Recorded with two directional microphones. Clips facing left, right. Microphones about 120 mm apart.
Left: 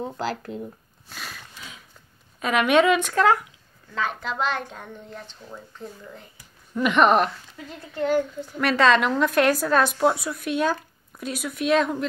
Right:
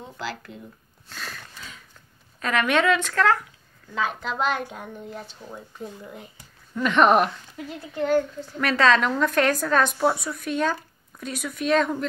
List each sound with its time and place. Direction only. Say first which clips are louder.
0.0 s speech: left 6 dB; 40° left (ahead or behind)
1.0 s a sound: right 1 dB; 10° left (ahead or behind)
2.4 s speech: left 3 dB; 15° left (ahead or behind)
3.9 s a woman's voice: right 1 dB; centre (ahead or behind)
6.7 s speech: left 2 dB; 10° left (ahead or behind)
7.0 s a woman's voice: right 1 dB; 5° right (ahead or behind)